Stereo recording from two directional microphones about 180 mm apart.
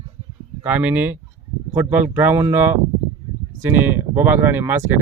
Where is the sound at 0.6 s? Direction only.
10° right (ahead or behind).